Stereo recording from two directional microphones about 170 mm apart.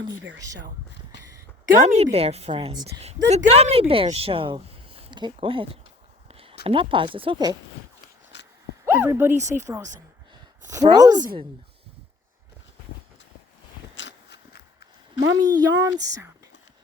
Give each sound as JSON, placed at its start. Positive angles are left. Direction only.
{"t": 1.8, "sound": "speech", "side_deg": -40}
{"t": 6.2, "sound": "a sound", "side_deg": -35}
{"t": 6.7, "sound": "speech", "side_deg": -30}
{"t": 8.3, "sound": "dog", "side_deg": 90}
{"t": 8.8, "sound": "speech", "side_deg": -15}
{"t": 10.7, "sound": "speech", "side_deg": -20}
{"t": 13.9, "sound": "walk", "side_deg": 85}
{"t": 15.4, "sound": "speech", "side_deg": -20}